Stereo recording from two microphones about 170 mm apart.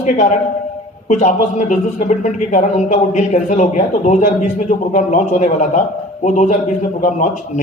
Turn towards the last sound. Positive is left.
turn(degrees=45)  # may be behind; listen again after turning